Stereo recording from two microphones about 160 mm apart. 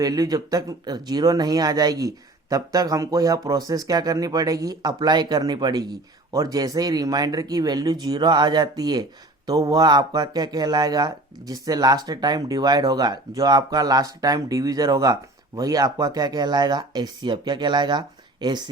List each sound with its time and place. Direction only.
0.0 s speech: 25° right (ahead or behind)